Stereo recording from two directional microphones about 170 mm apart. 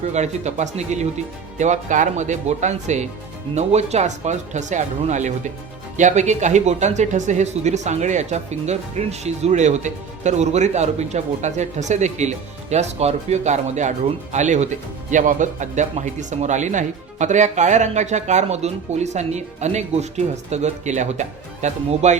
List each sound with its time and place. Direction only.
0.1 s speech: 40° right (ahead or behind)